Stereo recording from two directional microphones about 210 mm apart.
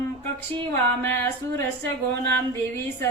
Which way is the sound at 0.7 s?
10° left (ahead or behind).